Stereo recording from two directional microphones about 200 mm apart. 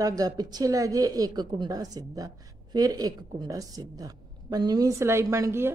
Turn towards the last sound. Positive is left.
turn(degrees=-10)  # may be behind; listen again after turning